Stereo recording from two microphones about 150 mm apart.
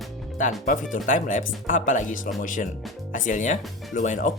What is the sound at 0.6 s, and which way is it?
Speech, 65° left (ahead or behind).